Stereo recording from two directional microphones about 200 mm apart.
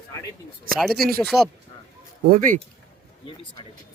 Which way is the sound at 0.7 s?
Centre (ahead or behind).